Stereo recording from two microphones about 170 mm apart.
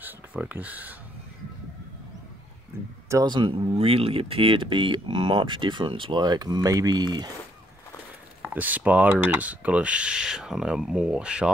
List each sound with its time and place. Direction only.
0.0 s speech: 10° right (ahead or behind)
3.1 s speech: 25° right (ahead or behind)
8.5 s speech: 10° right (ahead or behind)